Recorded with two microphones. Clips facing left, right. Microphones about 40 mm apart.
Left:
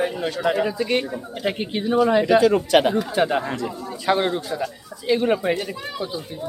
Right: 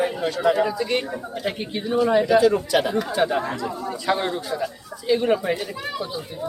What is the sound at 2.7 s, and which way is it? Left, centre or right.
Speech, left.